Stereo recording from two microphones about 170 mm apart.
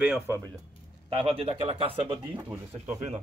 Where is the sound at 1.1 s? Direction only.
35° right (ahead or behind).